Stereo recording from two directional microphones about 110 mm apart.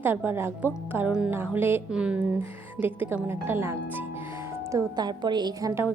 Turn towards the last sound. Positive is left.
turn(degrees=-30)  # may be behind; listen again after turning